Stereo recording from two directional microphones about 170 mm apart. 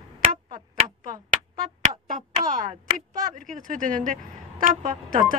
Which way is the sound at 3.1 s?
50° right (ahead or behind).